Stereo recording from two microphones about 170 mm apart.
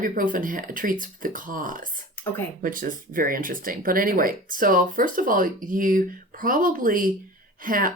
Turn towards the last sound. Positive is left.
turn(degrees=-55)  # may be behind; listen again after turning